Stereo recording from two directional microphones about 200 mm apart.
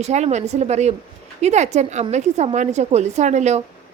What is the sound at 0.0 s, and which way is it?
Speech, 35° right (ahead or behind).